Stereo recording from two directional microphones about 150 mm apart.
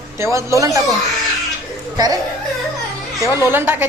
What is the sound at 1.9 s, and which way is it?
Speech, 25° right (ahead or behind).